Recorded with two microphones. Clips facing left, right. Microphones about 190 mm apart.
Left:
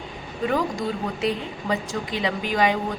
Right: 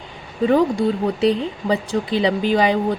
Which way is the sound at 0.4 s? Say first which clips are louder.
Right 8 dB; 35° right (ahead or behind).